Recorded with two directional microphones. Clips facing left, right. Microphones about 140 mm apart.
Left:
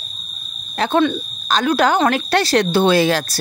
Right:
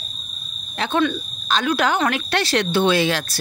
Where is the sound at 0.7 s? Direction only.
40° left (ahead or behind).